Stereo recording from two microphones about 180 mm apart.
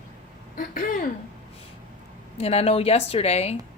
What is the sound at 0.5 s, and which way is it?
Speech, 50° left (ahead or behind).